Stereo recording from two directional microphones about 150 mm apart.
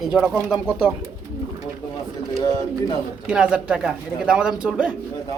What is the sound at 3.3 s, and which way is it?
Speech, 5° right (ahead or behind).